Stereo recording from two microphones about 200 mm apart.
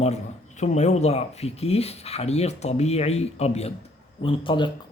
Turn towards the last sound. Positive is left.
turn(degrees=25)  # may be behind; listen again after turning